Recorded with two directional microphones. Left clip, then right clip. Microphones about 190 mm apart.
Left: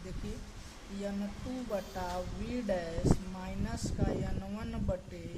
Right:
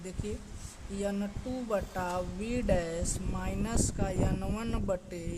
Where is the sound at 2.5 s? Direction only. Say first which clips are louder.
Right 4 dB; 45° right (ahead or behind).